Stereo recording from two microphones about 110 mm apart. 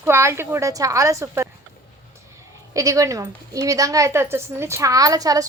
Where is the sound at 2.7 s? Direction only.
30° right (ahead or behind).